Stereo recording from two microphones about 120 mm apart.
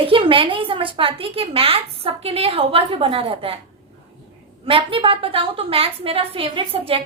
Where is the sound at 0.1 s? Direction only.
50° right (ahead or behind).